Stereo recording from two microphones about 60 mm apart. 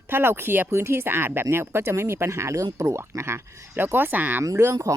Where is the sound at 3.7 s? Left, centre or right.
Right.